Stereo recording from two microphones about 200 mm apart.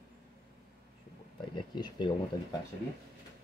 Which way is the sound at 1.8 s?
25° left (ahead or behind).